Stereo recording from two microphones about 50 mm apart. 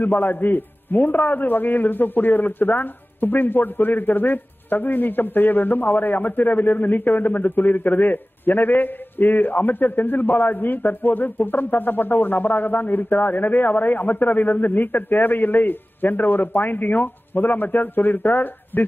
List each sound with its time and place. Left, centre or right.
0.0 s a man's voice: left